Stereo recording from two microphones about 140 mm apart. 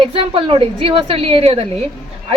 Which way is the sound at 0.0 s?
40° right (ahead or behind).